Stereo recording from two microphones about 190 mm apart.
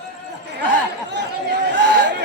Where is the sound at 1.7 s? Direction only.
70° right (ahead or behind).